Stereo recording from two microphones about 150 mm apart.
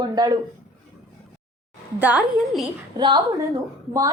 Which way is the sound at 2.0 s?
10° right (ahead or behind).